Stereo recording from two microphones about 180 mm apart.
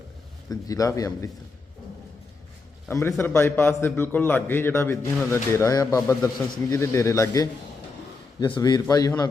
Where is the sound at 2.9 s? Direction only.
15° left (ahead or behind).